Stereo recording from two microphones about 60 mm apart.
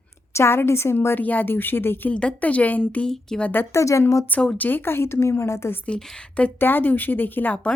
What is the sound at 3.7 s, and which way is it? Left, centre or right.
Speech, left.